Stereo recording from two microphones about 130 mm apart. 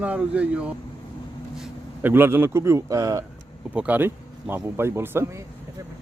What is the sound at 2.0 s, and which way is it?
Speech, 15° right (ahead or behind).